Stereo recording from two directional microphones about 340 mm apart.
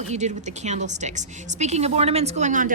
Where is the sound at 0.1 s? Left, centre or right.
Right.